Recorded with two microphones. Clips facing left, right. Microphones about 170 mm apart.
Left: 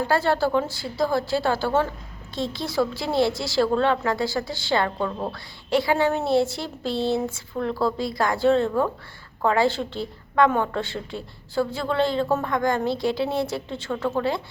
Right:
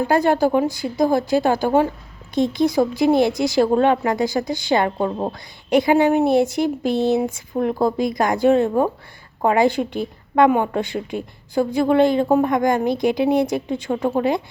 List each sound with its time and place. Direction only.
0.0 s a woman's voice: 15° right (ahead or behind)